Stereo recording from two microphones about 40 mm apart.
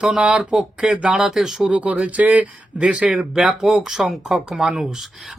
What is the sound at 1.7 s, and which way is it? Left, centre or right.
Speech, right.